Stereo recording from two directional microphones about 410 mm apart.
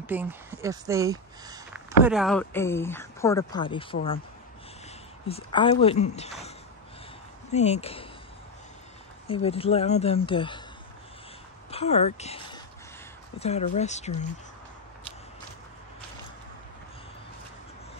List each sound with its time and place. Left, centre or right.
0.0 s speech: centre
5.3 s speech: centre
7.5 s speech: centre
9.3 s speech: centre
11.7 s speech: centre